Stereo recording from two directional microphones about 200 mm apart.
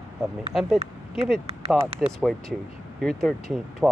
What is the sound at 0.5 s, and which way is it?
Speech, centre (ahead or behind).